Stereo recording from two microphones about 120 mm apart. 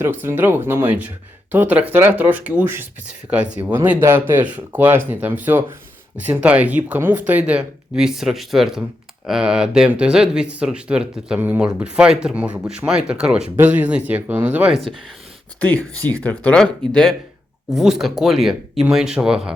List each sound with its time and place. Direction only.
0.0 s speech: 20° right (ahead or behind)
16.0 s speech: 15° left (ahead or behind); by 19.4 s 5° right (ahead or behind)